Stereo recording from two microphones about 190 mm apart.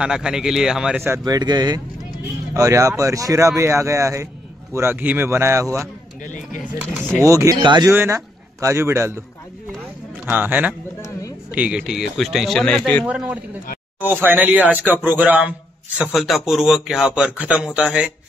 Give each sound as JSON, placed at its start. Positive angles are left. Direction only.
{"t": 0.0, "sound": "a man's voice", "side_deg": -5}
{"t": 1.0, "sound": "speech", "side_deg": -15}
{"t": 6.2, "sound": "a sound", "side_deg": 45}
{"t": 6.8, "sound": "a man's voice", "side_deg": -15}
{"t": 10.2, "sound": "a man's voice", "side_deg": -10}
{"t": 13.0, "sound": "a man's voice", "side_deg": -5}